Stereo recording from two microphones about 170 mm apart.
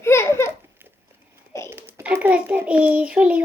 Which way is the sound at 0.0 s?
15° left (ahead or behind).